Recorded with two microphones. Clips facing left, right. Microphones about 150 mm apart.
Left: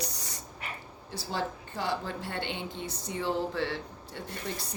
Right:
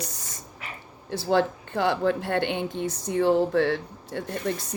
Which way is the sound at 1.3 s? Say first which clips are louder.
Right 11 dB; 65° right (ahead or behind).